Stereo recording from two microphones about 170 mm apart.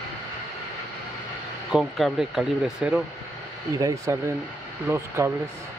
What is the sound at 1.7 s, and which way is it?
Speech, centre (ahead or behind).